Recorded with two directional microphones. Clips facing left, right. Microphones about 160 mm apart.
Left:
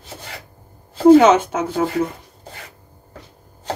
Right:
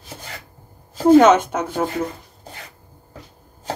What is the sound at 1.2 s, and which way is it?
Speech, 10° left (ahead or behind).